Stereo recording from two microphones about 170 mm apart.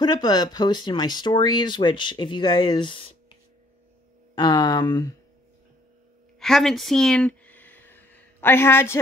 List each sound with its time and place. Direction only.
0.0 s speech: 25° left (ahead or behind)
4.4 s speech: 25° left (ahead or behind)
6.4 s a sound: centre (ahead or behind)